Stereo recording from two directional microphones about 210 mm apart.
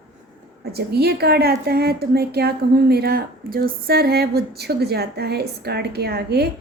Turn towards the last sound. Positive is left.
turn(degrees=-50)  # may be behind; listen again after turning